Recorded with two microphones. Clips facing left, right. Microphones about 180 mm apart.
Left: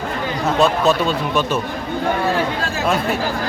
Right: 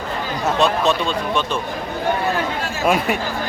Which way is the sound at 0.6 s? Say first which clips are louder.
Left 3 dB; 5° left (ahead or behind).